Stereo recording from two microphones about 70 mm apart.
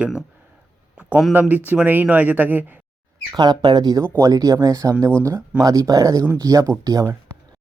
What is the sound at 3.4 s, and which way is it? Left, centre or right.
Speech, right.